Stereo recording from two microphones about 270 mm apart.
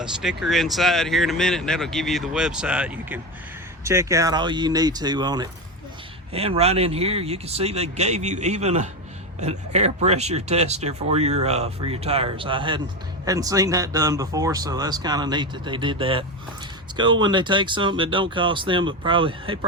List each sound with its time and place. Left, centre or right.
0.0 s speech: centre